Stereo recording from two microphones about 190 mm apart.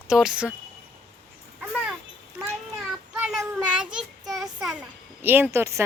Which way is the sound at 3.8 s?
5° right (ahead or behind).